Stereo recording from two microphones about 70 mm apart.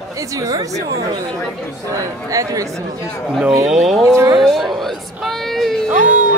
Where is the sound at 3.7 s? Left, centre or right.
Centre.